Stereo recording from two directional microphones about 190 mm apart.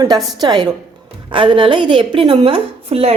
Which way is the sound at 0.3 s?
20° right (ahead or behind).